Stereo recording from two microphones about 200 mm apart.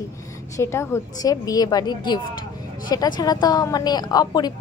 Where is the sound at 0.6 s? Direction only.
15° left (ahead or behind).